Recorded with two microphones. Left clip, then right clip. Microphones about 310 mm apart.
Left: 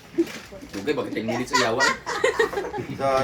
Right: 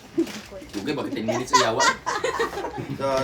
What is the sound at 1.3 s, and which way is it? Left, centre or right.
Speech, right.